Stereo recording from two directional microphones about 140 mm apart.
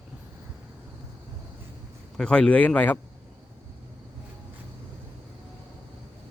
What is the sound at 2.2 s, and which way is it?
Speech, 5° left (ahead or behind).